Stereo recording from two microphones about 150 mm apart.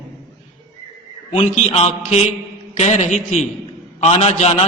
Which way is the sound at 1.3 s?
40° left (ahead or behind).